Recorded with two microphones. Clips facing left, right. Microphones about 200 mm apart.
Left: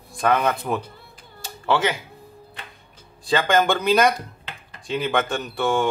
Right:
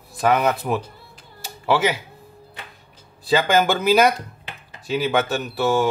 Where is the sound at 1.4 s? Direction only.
10° right (ahead or behind).